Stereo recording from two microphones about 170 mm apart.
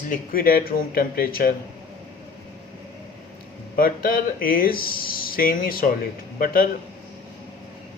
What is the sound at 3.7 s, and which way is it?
Speech, 55° left (ahead or behind).